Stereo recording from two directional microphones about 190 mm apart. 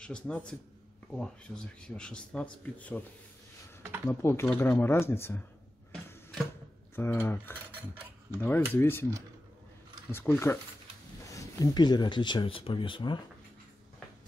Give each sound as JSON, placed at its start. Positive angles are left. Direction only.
{"t": 0.0, "sound": "speech", "side_deg": 5}
{"t": 4.1, "sound": "speech", "side_deg": 15}
{"t": 5.9, "sound": "a sound", "side_deg": 5}
{"t": 7.0, "sound": "speech", "side_deg": 10}
{"t": 10.1, "sound": "speech", "side_deg": 10}